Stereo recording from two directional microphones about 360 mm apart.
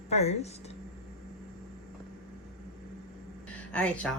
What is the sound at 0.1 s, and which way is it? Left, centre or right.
Speech, centre.